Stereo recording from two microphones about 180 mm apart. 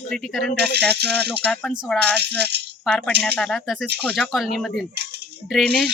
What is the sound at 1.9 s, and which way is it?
Speech, centre (ahead or behind).